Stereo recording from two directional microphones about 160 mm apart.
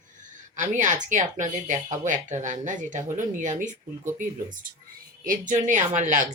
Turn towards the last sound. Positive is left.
turn(degrees=-50)  # may be behind; listen again after turning